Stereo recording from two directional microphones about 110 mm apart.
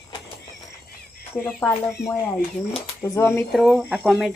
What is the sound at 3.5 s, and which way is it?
Speech, 5° right (ahead or behind).